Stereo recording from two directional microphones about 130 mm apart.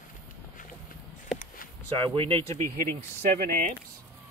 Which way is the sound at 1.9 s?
40° right (ahead or behind).